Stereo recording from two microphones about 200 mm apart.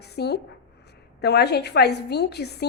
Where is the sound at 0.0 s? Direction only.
55° left (ahead or behind).